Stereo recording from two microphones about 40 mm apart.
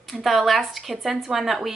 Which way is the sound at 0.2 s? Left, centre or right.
Centre.